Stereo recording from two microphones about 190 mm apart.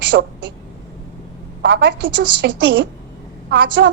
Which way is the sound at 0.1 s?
65° right (ahead or behind).